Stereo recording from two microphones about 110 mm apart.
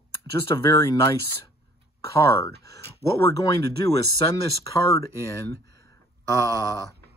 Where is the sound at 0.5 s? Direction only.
30° left (ahead or behind).